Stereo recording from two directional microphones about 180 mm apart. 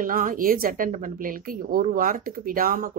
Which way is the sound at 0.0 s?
50° right (ahead or behind).